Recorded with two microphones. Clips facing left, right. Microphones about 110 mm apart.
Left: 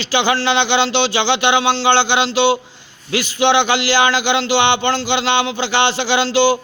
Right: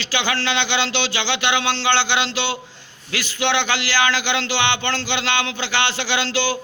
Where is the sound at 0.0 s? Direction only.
20° left (ahead or behind).